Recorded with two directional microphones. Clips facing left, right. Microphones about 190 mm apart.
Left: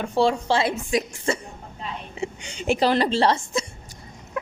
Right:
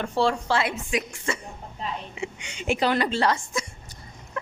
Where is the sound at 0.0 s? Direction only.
15° left (ahead or behind).